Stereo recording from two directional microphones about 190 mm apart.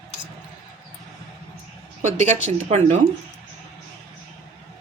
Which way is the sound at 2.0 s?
40° right (ahead or behind).